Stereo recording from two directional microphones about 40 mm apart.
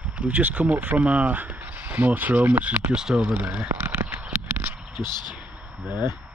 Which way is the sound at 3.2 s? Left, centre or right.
Right.